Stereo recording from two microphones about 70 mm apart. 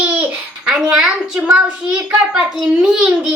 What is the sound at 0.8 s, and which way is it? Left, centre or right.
A child's voice, centre.